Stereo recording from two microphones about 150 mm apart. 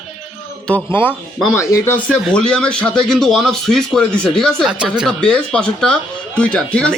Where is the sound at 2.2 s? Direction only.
5° left (ahead or behind).